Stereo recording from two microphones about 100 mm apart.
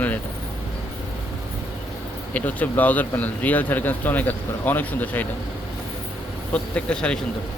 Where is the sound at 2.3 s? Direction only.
15° left (ahead or behind).